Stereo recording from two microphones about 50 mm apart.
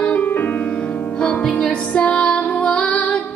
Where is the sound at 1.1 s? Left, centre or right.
Left.